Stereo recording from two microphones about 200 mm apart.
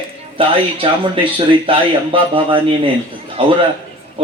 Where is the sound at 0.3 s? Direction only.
25° right (ahead or behind).